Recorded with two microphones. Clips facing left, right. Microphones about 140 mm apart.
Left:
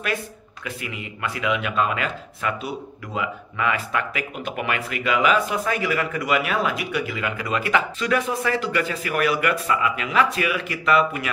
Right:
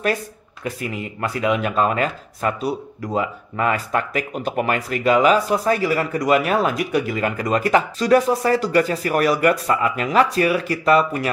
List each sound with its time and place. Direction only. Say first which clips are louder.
0.7 s speech: right 6 dB; 40° right (ahead or behind)